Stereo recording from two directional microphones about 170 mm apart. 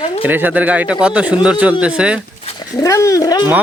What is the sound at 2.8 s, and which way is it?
Speech, 20° left (ahead or behind).